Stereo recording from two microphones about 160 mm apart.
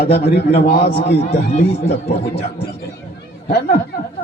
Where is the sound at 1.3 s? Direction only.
40° left (ahead or behind).